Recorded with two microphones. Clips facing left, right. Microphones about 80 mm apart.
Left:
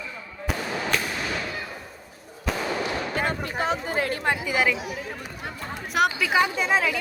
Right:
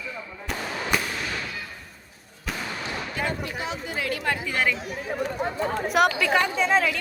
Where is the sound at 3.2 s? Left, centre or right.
Left.